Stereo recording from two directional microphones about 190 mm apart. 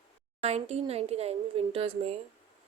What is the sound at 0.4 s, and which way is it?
Speech, 35° right (ahead or behind).